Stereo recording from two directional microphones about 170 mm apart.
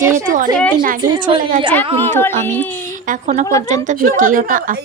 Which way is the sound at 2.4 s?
15° left (ahead or behind).